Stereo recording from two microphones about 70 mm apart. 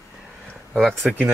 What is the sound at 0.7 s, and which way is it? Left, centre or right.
Speech, centre.